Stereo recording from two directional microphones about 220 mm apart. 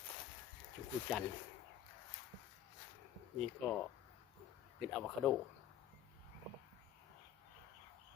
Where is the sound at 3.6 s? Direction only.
5° left (ahead or behind).